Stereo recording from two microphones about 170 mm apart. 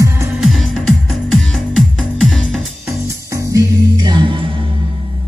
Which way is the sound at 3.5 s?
25° right (ahead or behind).